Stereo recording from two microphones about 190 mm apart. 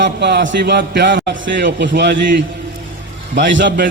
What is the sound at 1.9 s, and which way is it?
Speech, 55° right (ahead or behind).